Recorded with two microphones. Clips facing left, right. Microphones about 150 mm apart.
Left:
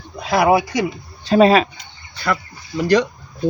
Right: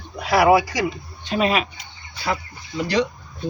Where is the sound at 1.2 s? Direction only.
35° left (ahead or behind).